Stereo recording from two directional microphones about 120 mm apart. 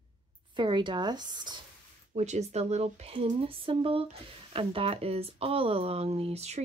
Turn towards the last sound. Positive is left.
turn(degrees=-60)  # may be behind; listen again after turning